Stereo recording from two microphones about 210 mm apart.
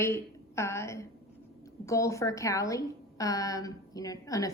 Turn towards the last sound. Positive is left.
turn(degrees=15)  # may be behind; listen again after turning